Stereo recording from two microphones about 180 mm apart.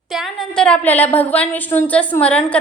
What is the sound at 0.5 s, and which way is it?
A woman's voice, 5° left (ahead or behind).